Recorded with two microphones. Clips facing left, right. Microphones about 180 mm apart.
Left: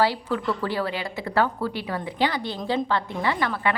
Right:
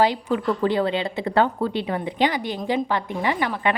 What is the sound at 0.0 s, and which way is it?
Speech, 20° right (ahead or behind).